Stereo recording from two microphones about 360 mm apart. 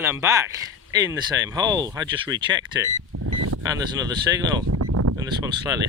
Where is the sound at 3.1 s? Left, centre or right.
Right.